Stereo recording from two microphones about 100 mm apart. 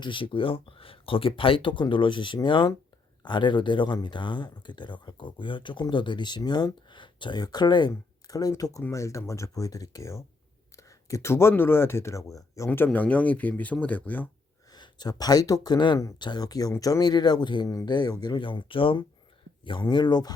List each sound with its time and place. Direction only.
0.0 s speech: 55° left (ahead or behind); by 14.3 s 15° left (ahead or behind)
14.7 s speech: 45° left (ahead or behind); by 19.0 s 60° left (ahead or behind)
19.6 s speech: 50° left (ahead or behind)